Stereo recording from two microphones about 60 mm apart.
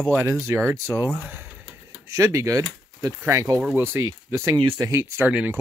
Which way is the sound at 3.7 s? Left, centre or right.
Right.